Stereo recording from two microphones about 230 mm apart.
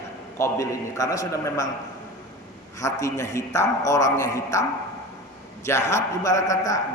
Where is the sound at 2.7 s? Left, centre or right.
Centre.